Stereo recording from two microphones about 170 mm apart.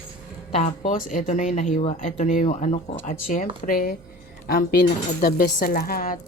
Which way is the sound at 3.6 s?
60° left (ahead or behind).